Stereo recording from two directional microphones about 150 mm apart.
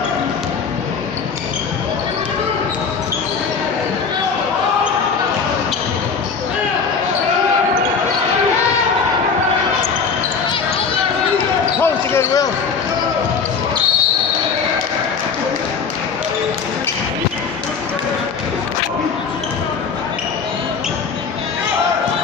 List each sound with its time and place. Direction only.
11.8 s basketball bounce: 15° left (ahead or behind)